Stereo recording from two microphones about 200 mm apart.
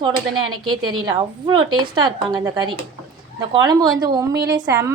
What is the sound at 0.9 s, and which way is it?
A woman's voice, 20° right (ahead or behind).